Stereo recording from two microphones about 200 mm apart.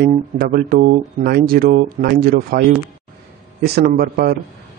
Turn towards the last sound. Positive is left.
turn(degrees=-50)  # may be behind; listen again after turning